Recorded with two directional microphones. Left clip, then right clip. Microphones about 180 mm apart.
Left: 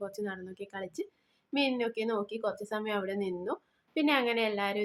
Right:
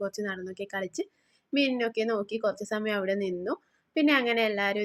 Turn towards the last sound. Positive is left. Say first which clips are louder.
# right 4 dB
turn(degrees=-15)  # may be behind; listen again after turning